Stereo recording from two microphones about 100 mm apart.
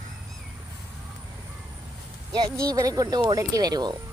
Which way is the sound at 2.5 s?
35° right (ahead or behind).